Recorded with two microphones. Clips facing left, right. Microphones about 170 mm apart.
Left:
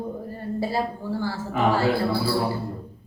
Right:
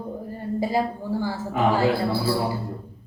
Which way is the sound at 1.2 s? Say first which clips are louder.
Even; 15° right (ahead or behind).